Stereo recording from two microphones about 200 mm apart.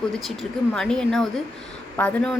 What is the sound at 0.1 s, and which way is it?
Speech, centre (ahead or behind).